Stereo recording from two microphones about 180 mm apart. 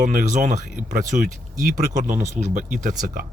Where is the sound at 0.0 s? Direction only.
45° right (ahead or behind).